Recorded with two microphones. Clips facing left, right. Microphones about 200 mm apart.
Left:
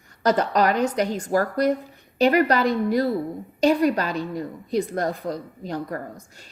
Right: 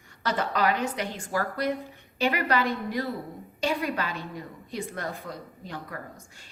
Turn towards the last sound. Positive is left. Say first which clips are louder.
# left 7 dB
turn(degrees=40)  # may be behind; listen again after turning